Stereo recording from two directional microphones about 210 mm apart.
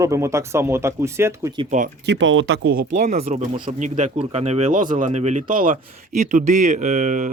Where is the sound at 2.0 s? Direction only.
60° right (ahead or behind).